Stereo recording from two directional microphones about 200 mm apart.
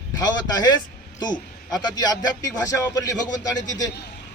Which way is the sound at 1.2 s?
20° left (ahead or behind).